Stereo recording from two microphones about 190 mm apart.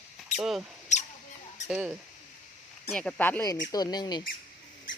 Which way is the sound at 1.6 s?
5° right (ahead or behind).